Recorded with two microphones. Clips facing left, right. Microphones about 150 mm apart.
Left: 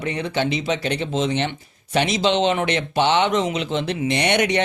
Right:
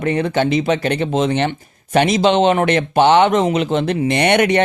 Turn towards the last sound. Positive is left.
turn(degrees=-55)  # may be behind; listen again after turning